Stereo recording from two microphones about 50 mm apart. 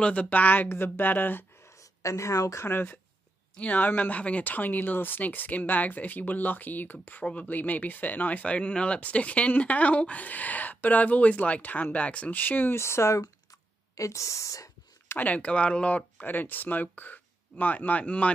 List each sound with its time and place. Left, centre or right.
0.0 s speech: left
1.8 s a woman's voice: left
2.7 s speech: left
3.5 s speech: left
12.3 s speech: left
12.7 s speech: left
13.9 s a sound: left
15.1 s speech: left